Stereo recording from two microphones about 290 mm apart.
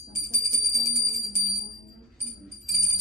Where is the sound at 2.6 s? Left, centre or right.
Centre.